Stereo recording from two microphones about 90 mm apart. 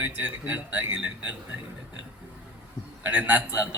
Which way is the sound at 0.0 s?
20° right (ahead or behind).